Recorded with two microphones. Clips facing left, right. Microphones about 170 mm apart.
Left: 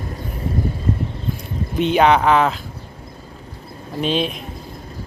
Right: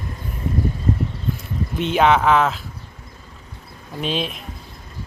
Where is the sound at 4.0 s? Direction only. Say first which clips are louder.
Left 4 dB; centre (ahead or behind).